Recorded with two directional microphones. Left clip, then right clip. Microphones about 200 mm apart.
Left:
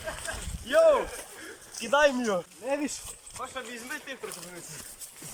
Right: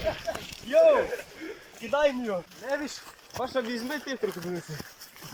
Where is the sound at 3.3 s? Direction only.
30° right (ahead or behind).